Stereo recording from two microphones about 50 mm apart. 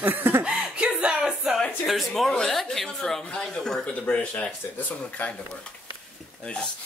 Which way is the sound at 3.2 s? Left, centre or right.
Centre.